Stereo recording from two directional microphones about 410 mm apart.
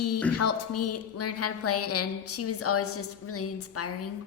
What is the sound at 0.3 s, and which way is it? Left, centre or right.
A woman's voice, left.